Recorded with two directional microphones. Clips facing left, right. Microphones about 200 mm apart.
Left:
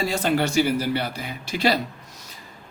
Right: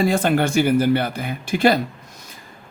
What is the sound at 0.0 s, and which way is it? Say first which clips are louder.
Speech: right 4 dB; 55° right (ahead or behind).